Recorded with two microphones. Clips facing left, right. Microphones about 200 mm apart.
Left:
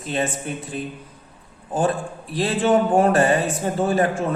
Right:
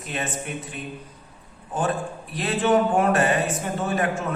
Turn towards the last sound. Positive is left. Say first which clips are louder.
# left 5 dB
turn(degrees=30)  # may be behind; listen again after turning